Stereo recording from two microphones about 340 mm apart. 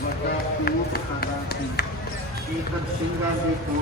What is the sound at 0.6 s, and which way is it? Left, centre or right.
Speech, left.